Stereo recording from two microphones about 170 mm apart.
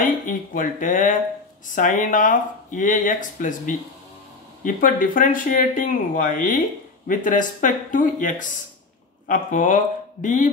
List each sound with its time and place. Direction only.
0.0 s speech: 50° left (ahead or behind)